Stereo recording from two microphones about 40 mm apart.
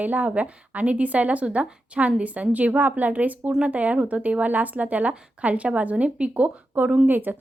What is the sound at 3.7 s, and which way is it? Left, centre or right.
A woman's voice, right.